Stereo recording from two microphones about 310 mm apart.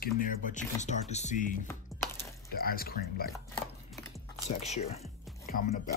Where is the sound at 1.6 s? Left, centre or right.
Centre.